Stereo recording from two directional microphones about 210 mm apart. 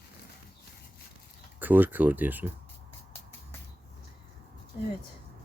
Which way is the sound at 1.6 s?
10° right (ahead or behind).